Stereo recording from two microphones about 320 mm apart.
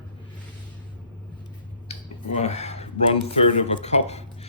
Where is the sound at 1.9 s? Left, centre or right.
Centre.